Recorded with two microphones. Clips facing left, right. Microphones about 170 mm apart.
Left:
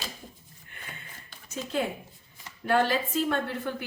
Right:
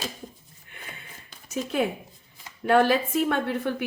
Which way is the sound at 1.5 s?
70° right (ahead or behind).